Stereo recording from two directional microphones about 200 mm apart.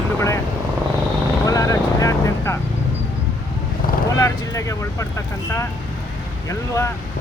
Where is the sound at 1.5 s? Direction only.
15° left (ahead or behind).